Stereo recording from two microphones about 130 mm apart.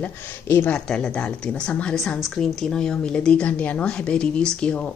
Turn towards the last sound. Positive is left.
turn(degrees=10)  # may be behind; listen again after turning